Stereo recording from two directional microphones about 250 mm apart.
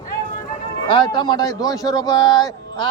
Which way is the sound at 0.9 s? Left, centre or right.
Centre.